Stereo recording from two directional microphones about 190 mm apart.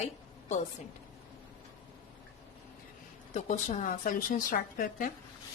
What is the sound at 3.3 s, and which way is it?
A woman's voice, 40° left (ahead or behind).